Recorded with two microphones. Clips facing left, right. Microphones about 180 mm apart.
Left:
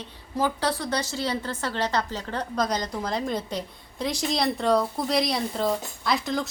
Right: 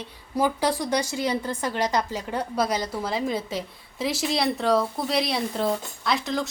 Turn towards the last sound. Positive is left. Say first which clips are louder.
# even
turn(degrees=0)  # may be behind; listen again after turning